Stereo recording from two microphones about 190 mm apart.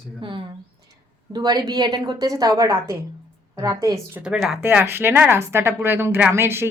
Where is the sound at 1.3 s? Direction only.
20° right (ahead or behind).